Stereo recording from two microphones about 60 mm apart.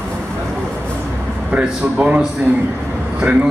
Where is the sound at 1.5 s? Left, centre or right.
Centre.